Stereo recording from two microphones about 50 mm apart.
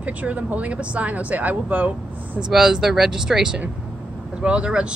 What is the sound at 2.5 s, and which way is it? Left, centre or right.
Speech, centre.